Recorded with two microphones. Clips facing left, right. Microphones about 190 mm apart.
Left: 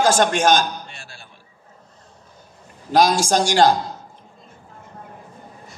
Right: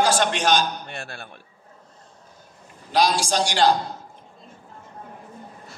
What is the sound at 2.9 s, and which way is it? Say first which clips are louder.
Speech: left 4 dB; 45° left (ahead or behind).